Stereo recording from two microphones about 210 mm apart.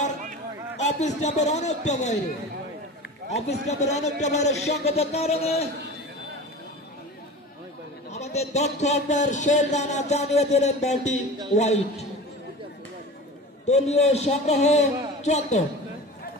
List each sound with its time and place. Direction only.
0.8 s speech: 35° left (ahead or behind)
3.6 s speech: 35° left (ahead or behind)
8.1 s speech: 30° left (ahead or behind)
13.7 s speech: 30° left (ahead or behind)